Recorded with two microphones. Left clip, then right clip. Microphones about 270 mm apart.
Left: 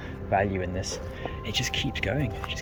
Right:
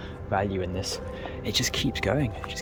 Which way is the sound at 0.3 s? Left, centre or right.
Centre.